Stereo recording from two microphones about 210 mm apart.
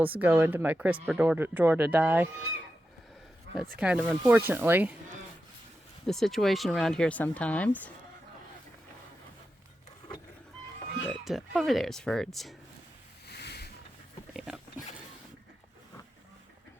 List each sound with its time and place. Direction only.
0.0 s speech: 10° right (ahead or behind)
3.8 s speech: 5° right (ahead or behind)
6.1 s speech: centre (ahead or behind)
11.1 s speech: centre (ahead or behind)
13.2 s a sound: 50° left (ahead or behind)
14.3 s speech: centre (ahead or behind)